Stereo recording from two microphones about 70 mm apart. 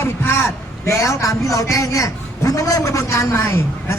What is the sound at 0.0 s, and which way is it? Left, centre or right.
A man's voice, left.